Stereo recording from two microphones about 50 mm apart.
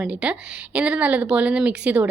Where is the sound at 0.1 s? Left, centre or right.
Right.